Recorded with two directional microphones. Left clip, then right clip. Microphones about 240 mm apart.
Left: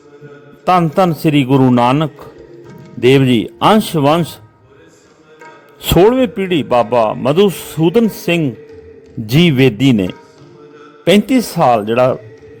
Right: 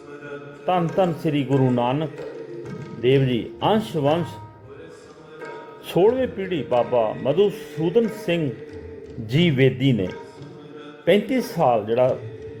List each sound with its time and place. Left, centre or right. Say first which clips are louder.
0.6 s a man's voice: left 9 dB; left
5.8 s a man's voice: left 9 dB; left